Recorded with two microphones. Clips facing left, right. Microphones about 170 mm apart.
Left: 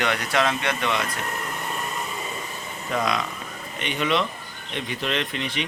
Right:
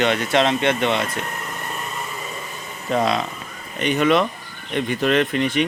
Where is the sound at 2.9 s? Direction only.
30° right (ahead or behind).